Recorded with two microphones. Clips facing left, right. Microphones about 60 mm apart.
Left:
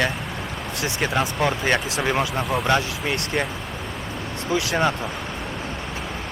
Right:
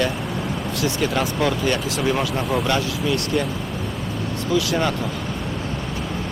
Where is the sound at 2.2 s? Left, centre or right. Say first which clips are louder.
Right 1 dB; centre.